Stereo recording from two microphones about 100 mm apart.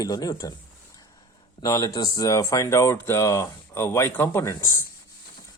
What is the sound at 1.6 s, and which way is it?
Speech, 45° left (ahead or behind).